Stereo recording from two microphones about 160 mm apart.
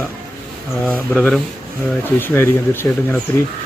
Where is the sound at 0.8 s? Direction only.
5° left (ahead or behind).